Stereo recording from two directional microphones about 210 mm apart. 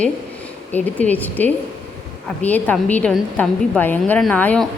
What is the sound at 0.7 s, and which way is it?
A woman's voice, 10° left (ahead or behind).